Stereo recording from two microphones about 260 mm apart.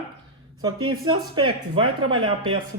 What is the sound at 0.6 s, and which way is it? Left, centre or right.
Speech, centre.